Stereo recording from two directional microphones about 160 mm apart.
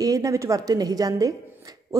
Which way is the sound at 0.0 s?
20° right (ahead or behind).